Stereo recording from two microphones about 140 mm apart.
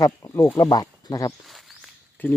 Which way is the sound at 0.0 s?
25° left (ahead or behind).